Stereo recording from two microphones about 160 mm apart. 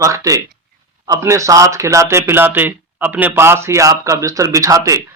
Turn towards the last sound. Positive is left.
turn(degrees=-20)  # may be behind; listen again after turning